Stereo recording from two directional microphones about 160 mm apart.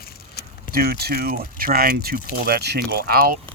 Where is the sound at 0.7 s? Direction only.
75° right (ahead or behind).